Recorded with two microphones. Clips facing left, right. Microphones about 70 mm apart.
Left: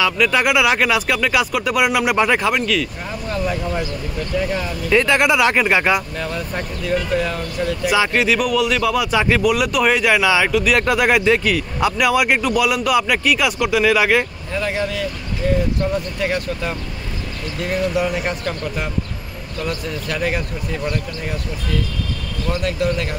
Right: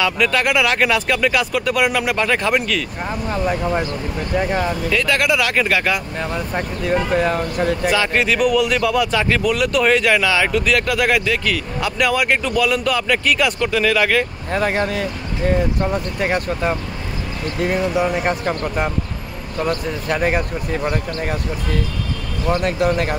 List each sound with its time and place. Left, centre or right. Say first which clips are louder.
0.3 s speech: left 1 dB; centre
2.5 s speech: even; centre
3.3 s speech: right 2 dB; right
4.8 s speech: left 6 dB; left
6.1 s speech: right 2 dB; right
8.1 s speech: right 1 dB; centre
10.4 s speech: left 1 dB; centre
10.7 s speech: left 2 dB; left
14.5 s speech: right 3 dB; right
19.9 s speech: right 3 dB; right